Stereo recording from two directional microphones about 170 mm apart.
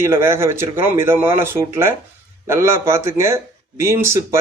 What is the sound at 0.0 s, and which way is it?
Speech, 15° right (ahead or behind).